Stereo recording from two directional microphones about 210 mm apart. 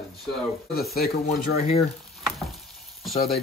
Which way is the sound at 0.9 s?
45° left (ahead or behind).